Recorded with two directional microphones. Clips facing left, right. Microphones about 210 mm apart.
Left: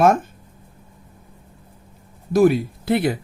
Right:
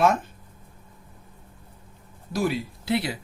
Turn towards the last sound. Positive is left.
turn(degrees=50)  # may be behind; listen again after turning